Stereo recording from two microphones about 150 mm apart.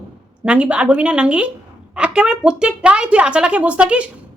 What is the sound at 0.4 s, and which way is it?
Speech, 10° right (ahead or behind).